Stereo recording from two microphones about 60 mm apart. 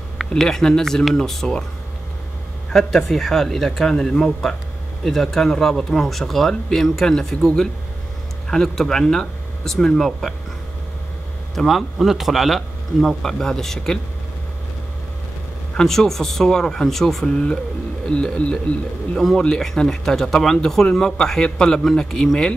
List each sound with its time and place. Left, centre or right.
0.4 s speech: centre
2.7 s speech: centre
11.5 s speech: centre
15.8 s speech: centre